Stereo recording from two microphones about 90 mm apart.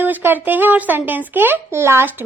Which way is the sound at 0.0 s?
20° right (ahead or behind).